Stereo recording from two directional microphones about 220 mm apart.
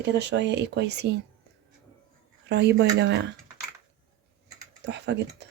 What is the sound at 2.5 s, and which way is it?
Speech, 50° right (ahead or behind).